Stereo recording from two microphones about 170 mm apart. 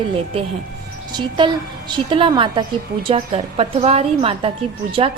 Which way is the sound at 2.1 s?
30° right (ahead or behind).